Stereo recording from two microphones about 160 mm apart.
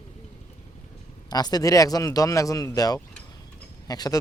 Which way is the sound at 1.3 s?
25° left (ahead or behind).